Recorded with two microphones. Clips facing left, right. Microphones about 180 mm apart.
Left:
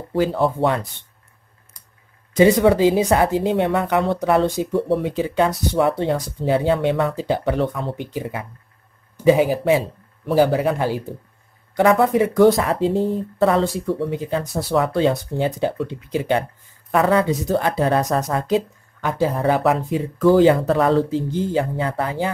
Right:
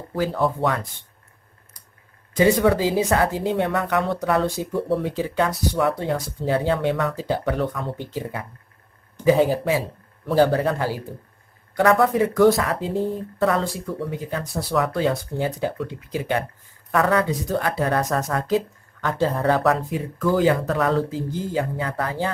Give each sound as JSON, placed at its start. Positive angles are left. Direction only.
{"t": 0.1, "sound": "speech", "side_deg": 25}
{"t": 2.3, "sound": "a man's voice", "side_deg": 20}
{"t": 9.7, "sound": "a sound", "side_deg": 20}
{"t": 10.3, "sound": "a man's voice", "side_deg": 10}